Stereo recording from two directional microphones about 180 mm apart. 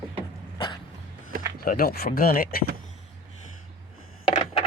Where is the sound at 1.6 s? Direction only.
55° left (ahead or behind).